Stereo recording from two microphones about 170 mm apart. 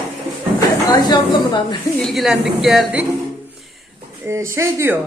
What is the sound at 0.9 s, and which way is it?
Speech, 25° left (ahead or behind).